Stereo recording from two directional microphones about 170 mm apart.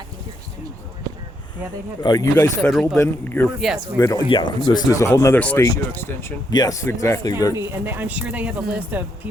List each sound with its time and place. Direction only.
2.0 s speech: 20° left (ahead or behind)
2.6 s speech: centre (ahead or behind)
3.0 s speech: 10° left (ahead or behind)
3.6 s speech: centre (ahead or behind)
3.9 s speech: 20° left (ahead or behind)
7.5 s speech: 15° right (ahead or behind)